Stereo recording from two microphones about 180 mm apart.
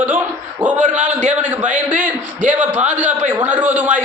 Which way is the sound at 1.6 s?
45° right (ahead or behind).